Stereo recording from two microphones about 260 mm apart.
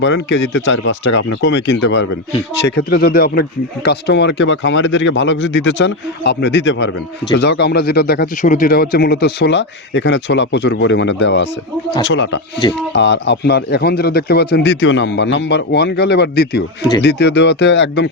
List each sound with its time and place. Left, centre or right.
0.0 s speech: left